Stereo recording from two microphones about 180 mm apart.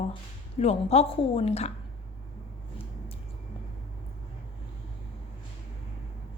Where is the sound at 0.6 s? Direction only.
35° left (ahead or behind).